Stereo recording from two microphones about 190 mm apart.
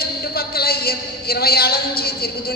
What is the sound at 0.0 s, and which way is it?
A woman's voice, 55° left (ahead or behind).